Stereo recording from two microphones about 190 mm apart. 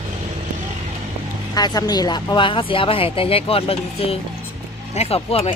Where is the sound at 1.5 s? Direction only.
20° left (ahead or behind).